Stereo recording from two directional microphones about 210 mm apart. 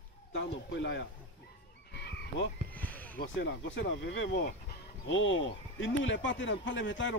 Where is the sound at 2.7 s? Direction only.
10° left (ahead or behind).